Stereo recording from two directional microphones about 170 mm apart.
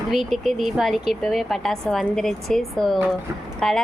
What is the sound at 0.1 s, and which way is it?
Speech, centre (ahead or behind).